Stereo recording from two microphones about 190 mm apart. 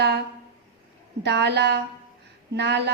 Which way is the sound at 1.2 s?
65° right (ahead or behind).